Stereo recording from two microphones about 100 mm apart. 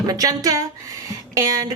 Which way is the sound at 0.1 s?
35° right (ahead or behind).